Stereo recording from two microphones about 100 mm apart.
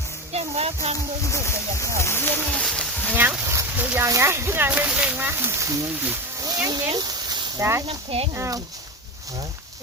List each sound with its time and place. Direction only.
0.3 s speech: 90° right
1.3 s speech: 30° left (ahead or behind)
2.6 s speech: 10° left (ahead or behind)
3.2 s speech: 15° right (ahead or behind)
3.4 s a sound: 30° right (ahead or behind)
3.8 s speech: 15° right (ahead or behind)
4.0 s speech: 25° right (ahead or behind)
6.7 s a sound: 40° right (ahead or behind)
7.6 s speech: 25° right (ahead or behind)
7.9 s speech: 75° right (ahead or behind)
8.4 s speech: 35° right (ahead or behind)